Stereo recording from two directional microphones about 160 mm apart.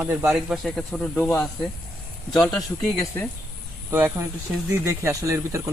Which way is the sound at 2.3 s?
Centre (ahead or behind).